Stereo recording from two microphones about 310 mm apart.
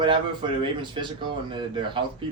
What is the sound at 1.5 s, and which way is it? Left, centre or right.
Speech, centre.